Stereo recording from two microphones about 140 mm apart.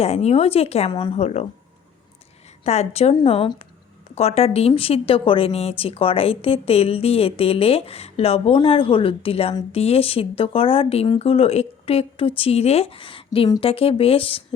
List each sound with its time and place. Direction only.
0.0 s speech: 50° left (ahead or behind)
0.9 s a woman's voice: 30° left (ahead or behind)
1.1 s speech: 50° left (ahead or behind)
2.6 s a woman's voice: 50° left (ahead or behind)